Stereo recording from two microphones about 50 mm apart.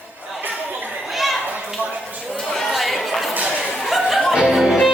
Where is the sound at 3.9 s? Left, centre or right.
Centre.